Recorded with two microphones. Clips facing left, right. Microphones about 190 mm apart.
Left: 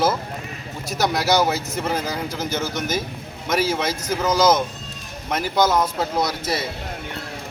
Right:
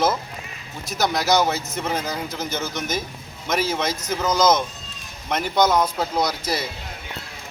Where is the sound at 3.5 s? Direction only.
5° left (ahead or behind).